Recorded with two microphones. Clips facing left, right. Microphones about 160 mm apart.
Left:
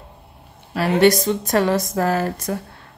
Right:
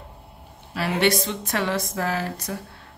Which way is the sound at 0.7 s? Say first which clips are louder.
Left 7 dB; 45° left (ahead or behind).